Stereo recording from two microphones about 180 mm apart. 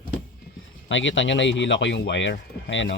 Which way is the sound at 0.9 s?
90° left.